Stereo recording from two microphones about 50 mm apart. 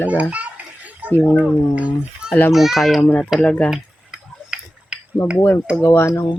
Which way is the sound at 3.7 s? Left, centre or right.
Centre.